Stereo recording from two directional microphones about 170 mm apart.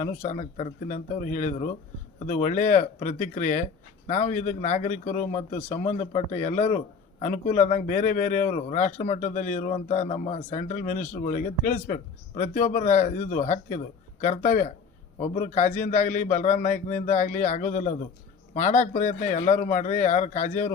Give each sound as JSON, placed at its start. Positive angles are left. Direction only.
{"t": 0.2, "sound": "a man's voice", "side_deg": 45}